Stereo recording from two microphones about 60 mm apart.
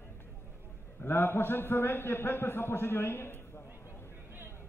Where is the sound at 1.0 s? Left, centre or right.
Left.